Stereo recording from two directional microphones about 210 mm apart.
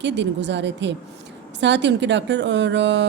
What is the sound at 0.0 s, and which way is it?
Speech, 55° right (ahead or behind).